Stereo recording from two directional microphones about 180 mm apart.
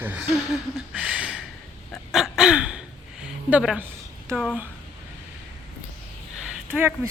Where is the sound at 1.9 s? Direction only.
Centre (ahead or behind).